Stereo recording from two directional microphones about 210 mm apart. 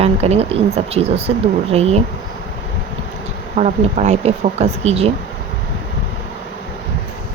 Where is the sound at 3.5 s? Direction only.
35° right (ahead or behind).